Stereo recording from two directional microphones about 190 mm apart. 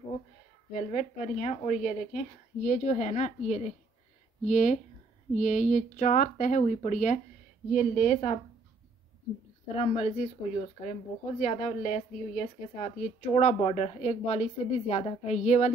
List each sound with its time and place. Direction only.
0.7 s speech: 40° left (ahead or behind)
9.8 s speech: 35° left (ahead or behind)
10.4 s speech: 20° left (ahead or behind)
10.8 s speech: 40° left (ahead or behind)